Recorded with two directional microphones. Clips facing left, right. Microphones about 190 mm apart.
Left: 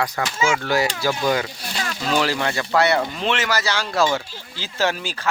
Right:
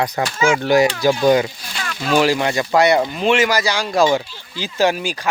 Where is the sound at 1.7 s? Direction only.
35° left (ahead or behind).